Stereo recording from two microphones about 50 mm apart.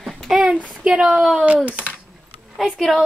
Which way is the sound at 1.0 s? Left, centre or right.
Centre.